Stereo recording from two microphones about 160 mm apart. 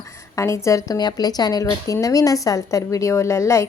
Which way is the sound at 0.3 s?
20° left (ahead or behind).